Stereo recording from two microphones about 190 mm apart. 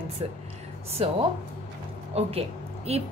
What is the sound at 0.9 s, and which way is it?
A woman's voice, 30° right (ahead or behind).